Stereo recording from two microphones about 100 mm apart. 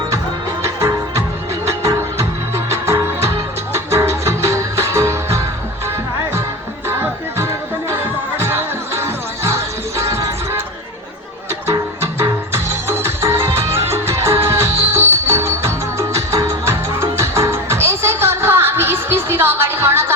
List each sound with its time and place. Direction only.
0.6 s music: 35° right (ahead or behind)
6.8 s music: 25° right (ahead or behind)
12.9 s music: 25° right (ahead or behind)